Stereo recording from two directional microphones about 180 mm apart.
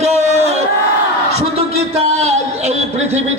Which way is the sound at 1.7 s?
35° right (ahead or behind).